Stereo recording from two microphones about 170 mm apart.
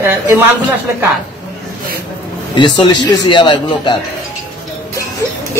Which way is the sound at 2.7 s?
25° left (ahead or behind).